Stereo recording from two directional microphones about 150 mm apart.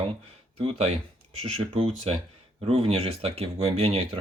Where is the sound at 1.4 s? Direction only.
40° right (ahead or behind).